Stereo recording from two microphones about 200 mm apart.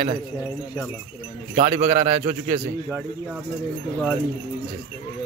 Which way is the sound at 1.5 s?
35° right (ahead or behind).